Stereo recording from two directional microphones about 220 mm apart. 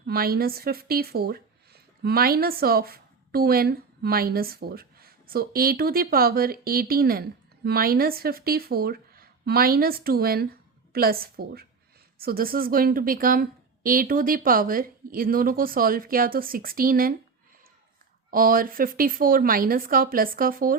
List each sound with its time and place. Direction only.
0.0 s a woman's voice: 45° right (ahead or behind)
18.3 s a woman's voice: 40° right (ahead or behind)